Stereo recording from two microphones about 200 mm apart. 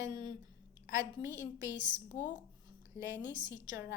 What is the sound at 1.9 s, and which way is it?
Speech, 40° left (ahead or behind).